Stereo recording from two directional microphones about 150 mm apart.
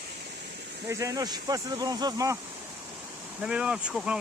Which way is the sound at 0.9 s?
20° right (ahead or behind).